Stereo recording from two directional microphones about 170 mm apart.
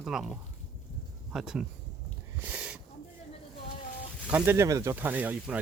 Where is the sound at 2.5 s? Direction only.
5° right (ahead or behind).